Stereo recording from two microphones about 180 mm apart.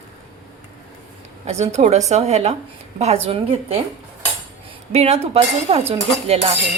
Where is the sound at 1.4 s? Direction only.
40° right (ahead or behind).